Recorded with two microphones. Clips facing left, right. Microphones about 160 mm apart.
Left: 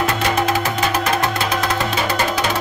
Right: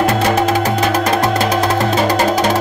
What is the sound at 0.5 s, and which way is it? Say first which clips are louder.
Music: right 4 dB; 40° right (ahead or behind).